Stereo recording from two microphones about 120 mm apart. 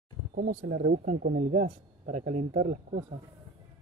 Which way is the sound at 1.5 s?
90° right.